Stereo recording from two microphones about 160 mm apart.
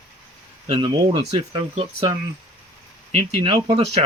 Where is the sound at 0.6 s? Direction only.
30° right (ahead or behind).